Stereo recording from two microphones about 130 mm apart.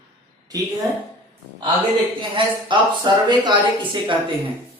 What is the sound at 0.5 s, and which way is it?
Speech, 30° right (ahead or behind).